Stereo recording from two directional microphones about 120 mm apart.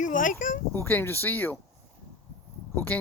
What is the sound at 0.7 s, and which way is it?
Speech, 20° left (ahead or behind).